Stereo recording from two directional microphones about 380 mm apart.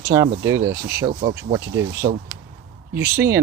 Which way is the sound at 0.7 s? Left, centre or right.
Right.